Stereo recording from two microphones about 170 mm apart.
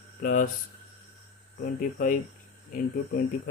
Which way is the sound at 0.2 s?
55° left (ahead or behind).